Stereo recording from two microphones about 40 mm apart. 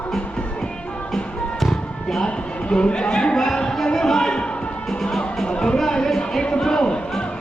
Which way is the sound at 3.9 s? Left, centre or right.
Centre.